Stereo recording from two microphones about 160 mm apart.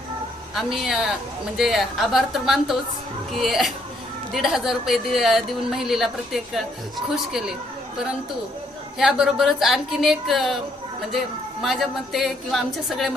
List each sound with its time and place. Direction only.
0.5 s a woman's voice: centre (ahead or behind)
9.0 s a woman's voice: 5° right (ahead or behind)
11.6 s a woman's voice: centre (ahead or behind)